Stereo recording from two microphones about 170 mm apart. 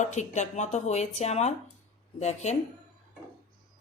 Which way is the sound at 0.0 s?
45° left (ahead or behind).